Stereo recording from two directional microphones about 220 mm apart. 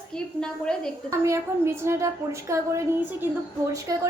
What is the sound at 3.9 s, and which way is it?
Speech, 15° right (ahead or behind).